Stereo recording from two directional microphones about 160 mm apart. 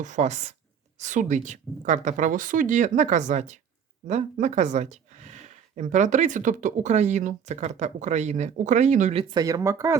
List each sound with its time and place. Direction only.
0.0 s speech: 50° right (ahead or behind)
9.3 s speech: 20° right (ahead or behind)